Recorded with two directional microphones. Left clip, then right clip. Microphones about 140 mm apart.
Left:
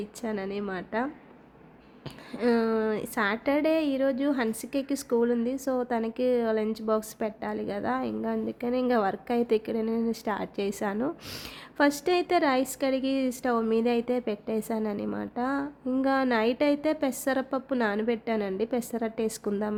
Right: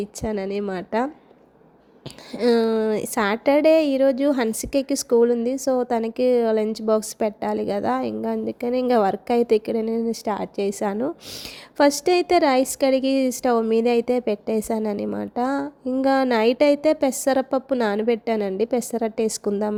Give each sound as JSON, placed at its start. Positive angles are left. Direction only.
{"t": 0.0, "sound": "a woman's voice", "side_deg": -40}
{"t": 2.3, "sound": "a woman's voice", "side_deg": -40}